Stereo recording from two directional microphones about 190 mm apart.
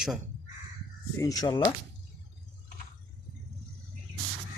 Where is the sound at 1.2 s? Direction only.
20° left (ahead or behind).